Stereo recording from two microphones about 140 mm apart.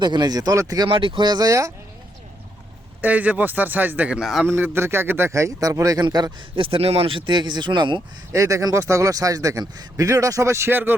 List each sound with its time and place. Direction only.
0.0 s speech: 30° right (ahead or behind)
0.9 s speech: 40° right (ahead or behind)
3.0 s speech: 10° right (ahead or behind)
4.5 s speech: 15° right (ahead or behind); by 8.0 s 35° right (ahead or behind)
8.3 s speech: 20° right (ahead or behind)